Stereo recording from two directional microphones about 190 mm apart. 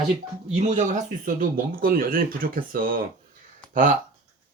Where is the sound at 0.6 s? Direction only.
40° right (ahead or behind).